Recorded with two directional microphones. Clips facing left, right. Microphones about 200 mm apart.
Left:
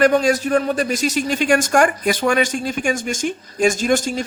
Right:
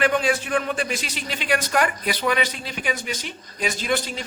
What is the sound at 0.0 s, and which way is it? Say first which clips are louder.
Speech: left 6 dB; 40° left (ahead or behind).